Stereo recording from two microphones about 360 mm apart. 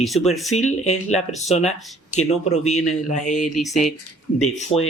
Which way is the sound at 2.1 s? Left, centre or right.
Left.